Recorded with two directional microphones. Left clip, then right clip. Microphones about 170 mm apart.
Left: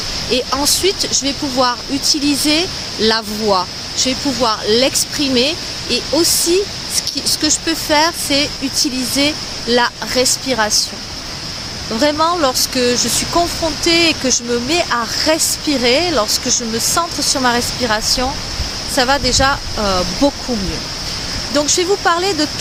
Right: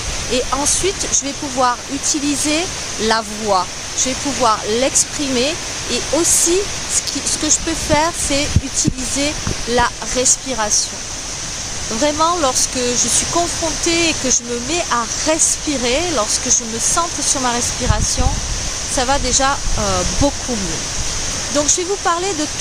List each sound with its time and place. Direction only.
0.3 s speech: 15° left (ahead or behind)
7.4 s speech: 15° left (ahead or behind)
12.0 s speech: 10° left (ahead or behind)
21.5 s speech: 5° left (ahead or behind)